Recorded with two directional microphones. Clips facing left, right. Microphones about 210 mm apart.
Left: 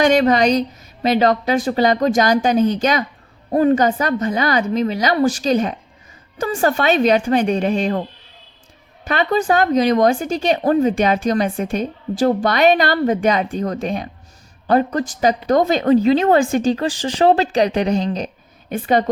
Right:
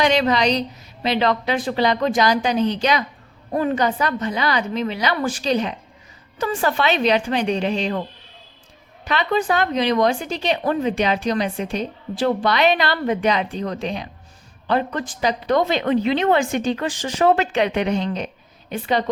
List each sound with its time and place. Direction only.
0.0 s a woman's voice: 50° left (ahead or behind)
9.0 s a woman's voice: 45° left (ahead or behind)
18.7 s a woman's voice: 50° left (ahead or behind)